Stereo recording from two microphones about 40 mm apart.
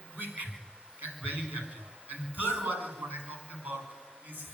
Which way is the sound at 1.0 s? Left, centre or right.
Right.